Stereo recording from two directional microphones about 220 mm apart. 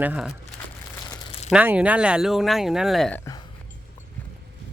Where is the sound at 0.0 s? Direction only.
5° right (ahead or behind).